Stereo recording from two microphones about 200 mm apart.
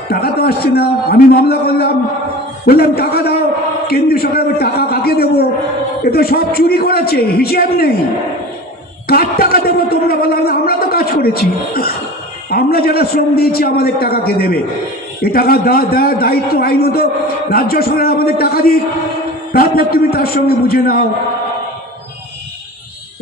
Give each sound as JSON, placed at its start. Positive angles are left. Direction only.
{"t": 0.1, "sound": "a man's voice", "side_deg": 50}
{"t": 9.0, "sound": "a sound", "side_deg": 50}
{"t": 12.4, "sound": "a man's voice", "side_deg": 50}